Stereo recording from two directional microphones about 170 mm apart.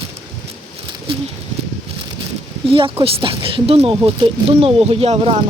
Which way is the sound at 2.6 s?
30° right (ahead or behind).